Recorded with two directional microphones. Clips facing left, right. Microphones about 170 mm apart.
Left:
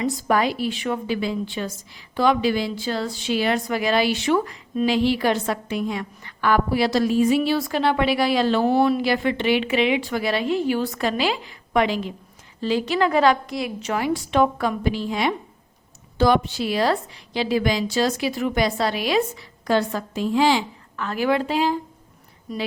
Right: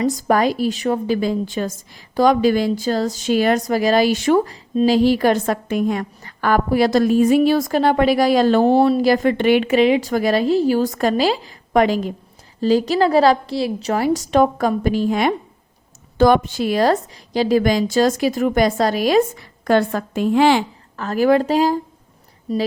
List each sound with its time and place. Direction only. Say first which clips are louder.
0.0 s a woman's voice: right 4 dB; 40° right (ahead or behind); by 20.7 s 60° right (ahead or behind)
20.9 s a woman's voice: right 6 dB; 40° right (ahead or behind)
22.5 s a woman's voice: right 8 dB; 30° right (ahead or behind)